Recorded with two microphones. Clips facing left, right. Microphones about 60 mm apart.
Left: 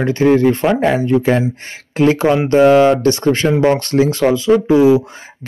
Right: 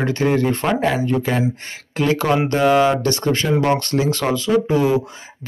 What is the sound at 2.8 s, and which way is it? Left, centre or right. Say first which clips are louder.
Speech: left 5 dB; left.